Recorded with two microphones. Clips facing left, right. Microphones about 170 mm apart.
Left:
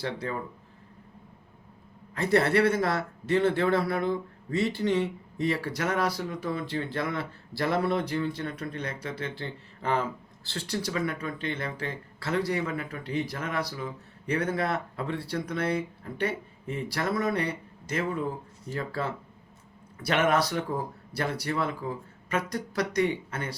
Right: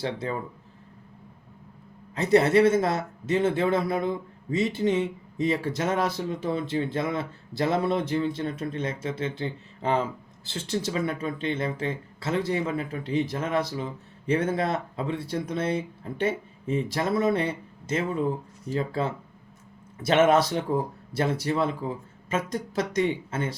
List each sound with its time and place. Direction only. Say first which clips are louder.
0.0 s speech: right 3 dB; 20° right (ahead or behind)
2.1 s speech: right 4 dB; 20° right (ahead or behind)